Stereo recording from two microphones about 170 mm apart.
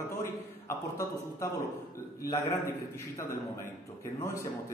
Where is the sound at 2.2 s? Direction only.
15° left (ahead or behind).